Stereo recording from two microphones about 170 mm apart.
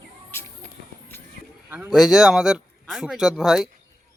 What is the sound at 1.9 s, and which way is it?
Speech, centre (ahead or behind).